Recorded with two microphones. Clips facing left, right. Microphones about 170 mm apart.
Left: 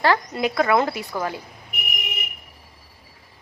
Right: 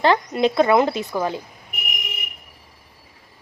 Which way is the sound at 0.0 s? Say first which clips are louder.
Right 3 dB; 20° right (ahead or behind).